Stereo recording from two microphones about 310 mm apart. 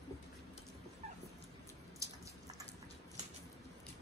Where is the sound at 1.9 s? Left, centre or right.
Centre.